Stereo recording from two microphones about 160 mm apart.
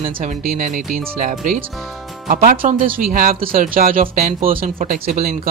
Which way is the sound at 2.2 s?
60° right (ahead or behind).